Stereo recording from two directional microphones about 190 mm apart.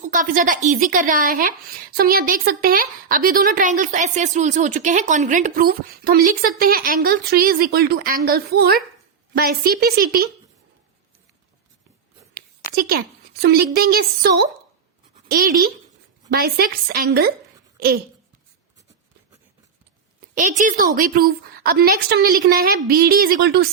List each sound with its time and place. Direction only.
0.0 s a woman's voice: 45° right (ahead or behind)
12.7 s a woman's voice: 55° right (ahead or behind)
20.3 s a woman's voice: 40° right (ahead or behind); by 23.6 s 60° right (ahead or behind)